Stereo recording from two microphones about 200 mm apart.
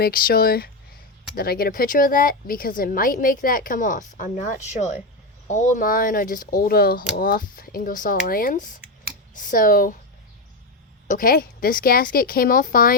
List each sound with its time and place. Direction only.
0.0 s a woman's voice: 45° left (ahead or behind)
11.1 s a woman's voice: 45° left (ahead or behind)